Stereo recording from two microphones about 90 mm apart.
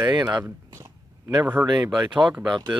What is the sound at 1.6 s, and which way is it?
Speech, 5° right (ahead or behind).